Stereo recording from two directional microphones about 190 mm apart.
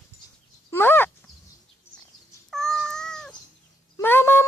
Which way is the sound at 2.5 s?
Centre (ahead or behind).